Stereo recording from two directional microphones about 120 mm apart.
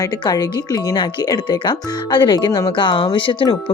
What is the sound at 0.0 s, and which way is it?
Speech, 35° left (ahead or behind).